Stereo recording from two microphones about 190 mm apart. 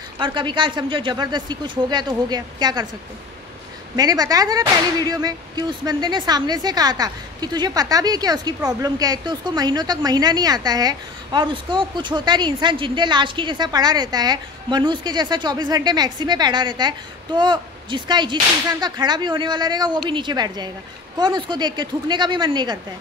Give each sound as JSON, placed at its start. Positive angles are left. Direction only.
{"t": 0.2, "sound": "speech", "side_deg": -25}
{"t": 3.9, "sound": "speech", "side_deg": -20}